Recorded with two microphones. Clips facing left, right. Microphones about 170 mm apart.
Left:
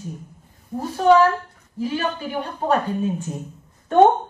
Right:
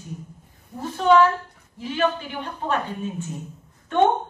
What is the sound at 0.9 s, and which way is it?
A woman's voice, 40° left (ahead or behind).